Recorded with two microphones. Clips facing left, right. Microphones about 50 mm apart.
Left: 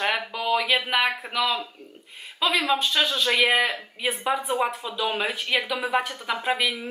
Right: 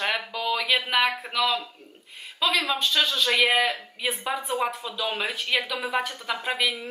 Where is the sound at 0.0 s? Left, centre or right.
Centre.